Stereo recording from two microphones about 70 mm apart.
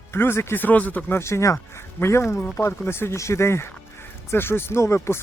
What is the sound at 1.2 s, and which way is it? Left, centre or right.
Speech, left.